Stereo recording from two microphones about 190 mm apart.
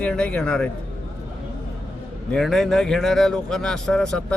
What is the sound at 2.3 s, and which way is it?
Speech, centre (ahead or behind).